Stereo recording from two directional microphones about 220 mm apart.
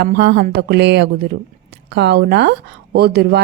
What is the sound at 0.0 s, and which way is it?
A woman's voice, 50° right (ahead or behind).